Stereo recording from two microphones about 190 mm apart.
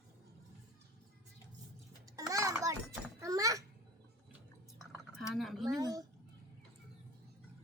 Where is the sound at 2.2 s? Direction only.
15° right (ahead or behind).